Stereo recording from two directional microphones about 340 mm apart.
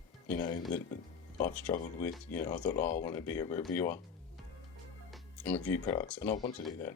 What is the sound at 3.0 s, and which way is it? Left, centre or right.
Speech, centre.